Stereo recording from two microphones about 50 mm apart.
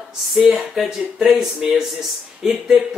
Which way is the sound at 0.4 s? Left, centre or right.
Centre.